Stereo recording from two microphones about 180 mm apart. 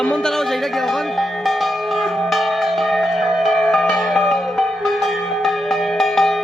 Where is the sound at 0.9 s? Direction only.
Centre (ahead or behind).